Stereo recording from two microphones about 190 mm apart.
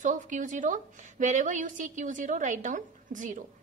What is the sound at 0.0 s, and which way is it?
A woman's voice, 40° right (ahead or behind).